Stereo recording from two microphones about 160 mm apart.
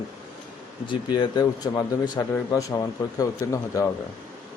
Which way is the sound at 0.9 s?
25° left (ahead or behind).